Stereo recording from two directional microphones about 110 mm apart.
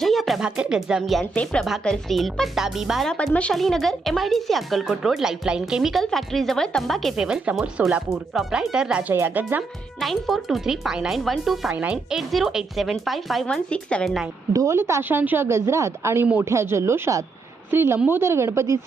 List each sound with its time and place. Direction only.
0.0 s speech: centre (ahead or behind)
3.1 s speech: 10° left (ahead or behind); by 9.6 s 15° right (ahead or behind)
10.0 s speech: centre (ahead or behind)
11.7 s speech: 10° right (ahead or behind)
12.1 s speech: centre (ahead or behind)
14.5 s a woman's voice: 25° right (ahead or behind)
16.2 s speech: 15° right (ahead or behind)
16.5 s a woman's voice: 25° right (ahead or behind)